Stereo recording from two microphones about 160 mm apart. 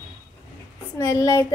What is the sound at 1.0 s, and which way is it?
Speech, 20° left (ahead or behind).